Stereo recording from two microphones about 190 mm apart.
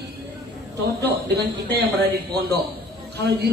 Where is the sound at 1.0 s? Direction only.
60° right (ahead or behind).